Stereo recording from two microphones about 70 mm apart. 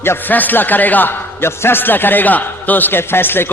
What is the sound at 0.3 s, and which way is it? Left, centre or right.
A man's voice, left.